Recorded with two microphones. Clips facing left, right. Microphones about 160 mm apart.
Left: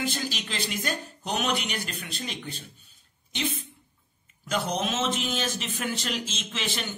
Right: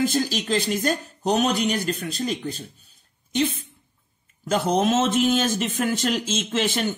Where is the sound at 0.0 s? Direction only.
40° right (ahead or behind).